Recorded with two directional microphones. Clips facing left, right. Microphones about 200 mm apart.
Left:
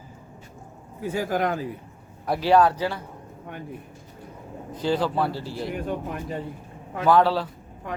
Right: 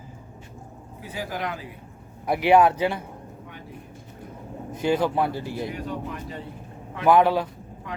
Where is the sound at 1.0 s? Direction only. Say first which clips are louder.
Left 7 dB; 50° left (ahead or behind).